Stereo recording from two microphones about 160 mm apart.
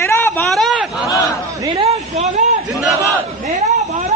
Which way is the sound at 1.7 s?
35° right (ahead or behind).